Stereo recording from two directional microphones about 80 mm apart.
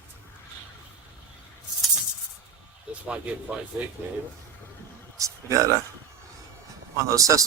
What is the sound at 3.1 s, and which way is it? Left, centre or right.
Speech, centre.